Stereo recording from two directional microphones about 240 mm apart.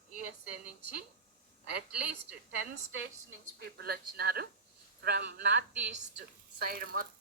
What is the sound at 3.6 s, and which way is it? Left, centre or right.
A woman's voice, right.